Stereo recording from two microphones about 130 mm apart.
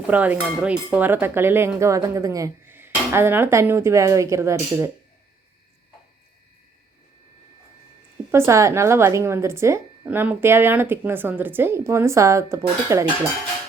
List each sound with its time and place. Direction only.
0.1 s speech: 10° right (ahead or behind)
8.3 s speech: 20° right (ahead or behind)